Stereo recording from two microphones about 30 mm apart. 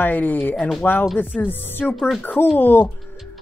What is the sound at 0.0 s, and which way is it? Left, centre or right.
Speech, left.